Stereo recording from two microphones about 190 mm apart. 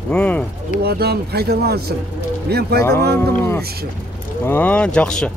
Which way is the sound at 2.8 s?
15° left (ahead or behind).